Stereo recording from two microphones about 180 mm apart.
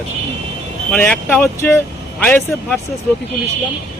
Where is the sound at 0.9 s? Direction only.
5° left (ahead or behind).